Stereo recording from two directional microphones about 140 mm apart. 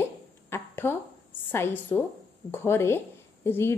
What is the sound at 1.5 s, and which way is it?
A woman's voice, 15° left (ahead or behind).